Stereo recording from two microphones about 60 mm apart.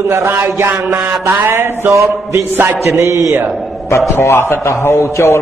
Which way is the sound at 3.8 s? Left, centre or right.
Left.